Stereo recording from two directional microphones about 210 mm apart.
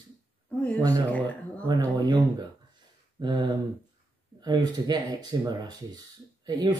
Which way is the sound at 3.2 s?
20° right (ahead or behind).